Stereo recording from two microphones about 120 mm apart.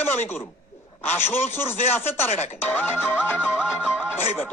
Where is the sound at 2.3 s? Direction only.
65° left (ahead or behind).